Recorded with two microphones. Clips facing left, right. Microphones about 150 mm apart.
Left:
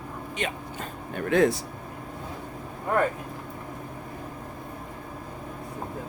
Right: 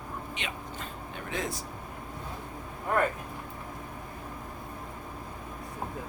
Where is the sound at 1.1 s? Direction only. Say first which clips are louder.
Left 14 dB; 60° left (ahead or behind).